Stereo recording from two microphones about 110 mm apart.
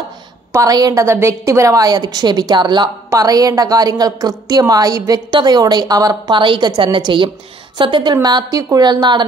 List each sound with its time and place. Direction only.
0.5 s a woman's voice: 30° right (ahead or behind)